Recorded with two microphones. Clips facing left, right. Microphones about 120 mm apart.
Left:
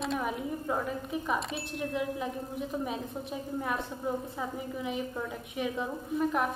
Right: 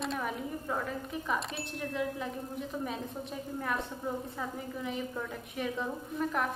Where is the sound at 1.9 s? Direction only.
15° left (ahead or behind).